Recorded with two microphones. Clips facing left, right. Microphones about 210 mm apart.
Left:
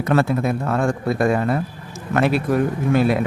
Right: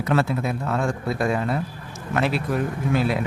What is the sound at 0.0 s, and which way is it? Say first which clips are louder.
Speech: left 4 dB; 50° left (ahead or behind).